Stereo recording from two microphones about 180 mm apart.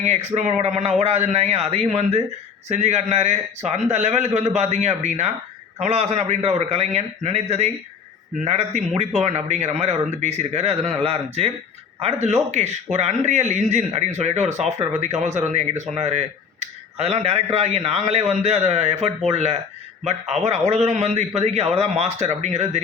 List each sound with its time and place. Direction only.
0.0 s speech: 40° right (ahead or behind)